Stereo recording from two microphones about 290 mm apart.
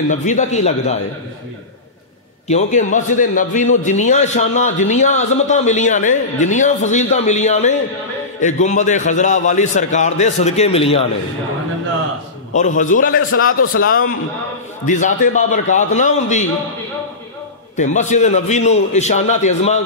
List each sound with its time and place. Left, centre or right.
0.1 s a man's voice: left
2.4 s a man's voice: left
12.5 s a man's voice: left
13.6 s a man's voice: left
14.9 s a man's voice: left
17.7 s a man's voice: left